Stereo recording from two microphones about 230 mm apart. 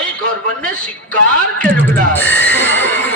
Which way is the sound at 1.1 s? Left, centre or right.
Centre.